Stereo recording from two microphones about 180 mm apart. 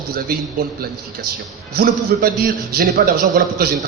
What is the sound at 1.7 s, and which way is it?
A man's voice, 55° right (ahead or behind).